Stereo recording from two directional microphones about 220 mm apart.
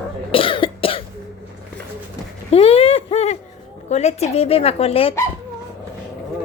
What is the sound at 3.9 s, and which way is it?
A woman's voice, 30° left (ahead or behind).